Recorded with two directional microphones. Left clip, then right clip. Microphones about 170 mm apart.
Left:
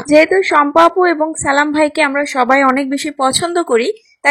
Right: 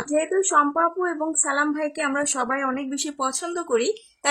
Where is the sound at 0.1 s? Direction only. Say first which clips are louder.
Left 11 dB; 30° left (ahead or behind).